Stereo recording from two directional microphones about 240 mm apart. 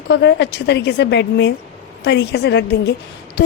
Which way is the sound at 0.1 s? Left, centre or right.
Left.